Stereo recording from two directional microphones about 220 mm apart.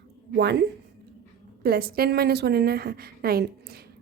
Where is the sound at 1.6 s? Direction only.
45° right (ahead or behind).